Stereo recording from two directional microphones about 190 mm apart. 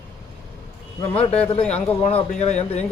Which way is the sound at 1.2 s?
5° left (ahead or behind).